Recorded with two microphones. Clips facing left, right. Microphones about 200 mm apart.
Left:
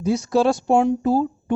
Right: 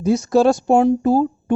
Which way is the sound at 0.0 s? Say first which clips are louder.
Right 4 dB; 45° right (ahead or behind).